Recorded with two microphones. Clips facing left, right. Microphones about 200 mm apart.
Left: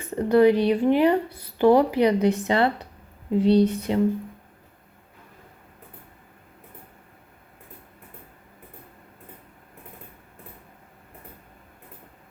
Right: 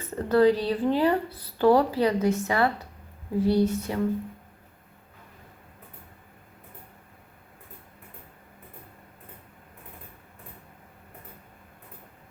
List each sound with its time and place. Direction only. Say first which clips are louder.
0.0 s speech: left 3 dB; 15° left (ahead or behind)